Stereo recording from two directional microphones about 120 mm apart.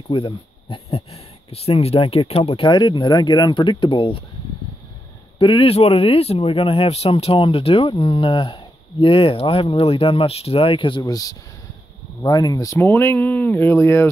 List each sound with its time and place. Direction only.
0.1 s speech: 45° left (ahead or behind)
5.4 s speech: 45° left (ahead or behind)
11.0 s speech: 30° left (ahead or behind)
12.7 s speech: 20° left (ahead or behind)